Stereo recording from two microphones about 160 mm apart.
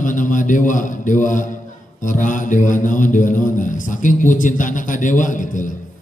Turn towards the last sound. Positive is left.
turn(degrees=55)  # may be behind; listen again after turning